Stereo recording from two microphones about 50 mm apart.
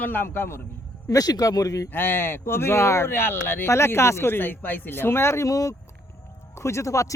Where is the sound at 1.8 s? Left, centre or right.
Left.